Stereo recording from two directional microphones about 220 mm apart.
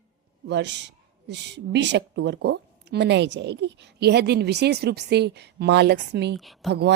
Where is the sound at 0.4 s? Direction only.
50° right (ahead or behind).